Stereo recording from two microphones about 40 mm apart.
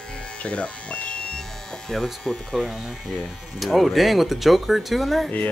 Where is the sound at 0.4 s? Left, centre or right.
Left.